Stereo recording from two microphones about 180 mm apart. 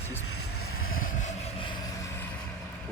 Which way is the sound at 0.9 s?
45° left (ahead or behind).